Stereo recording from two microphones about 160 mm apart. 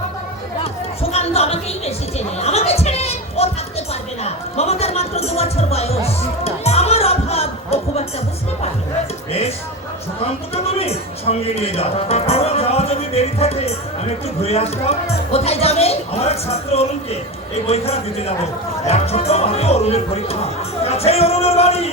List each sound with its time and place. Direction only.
1.1 s speech: 40° left (ahead or behind)
6.1 s music: 40° left (ahead or behind)
10.5 s speech: 40° left (ahead or behind)
20.8 s a sound: 40° left (ahead or behind)